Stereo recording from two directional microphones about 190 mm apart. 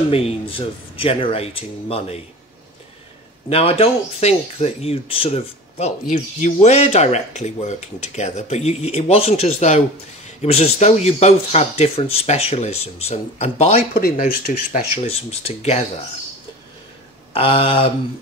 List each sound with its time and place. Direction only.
0.1 s speech: 30° left (ahead or behind)
3.4 s speech: 30° left (ahead or behind)
13.9 s speech: 50° left (ahead or behind); by 15.8 s 35° left (ahead or behind)
17.3 s speech: 30° left (ahead or behind)